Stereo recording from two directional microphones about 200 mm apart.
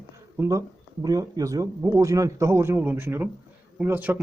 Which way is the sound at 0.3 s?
15° right (ahead or behind).